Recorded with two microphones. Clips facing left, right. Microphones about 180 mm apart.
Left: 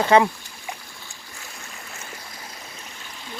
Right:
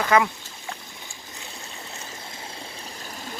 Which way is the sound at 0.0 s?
30° left (ahead or behind).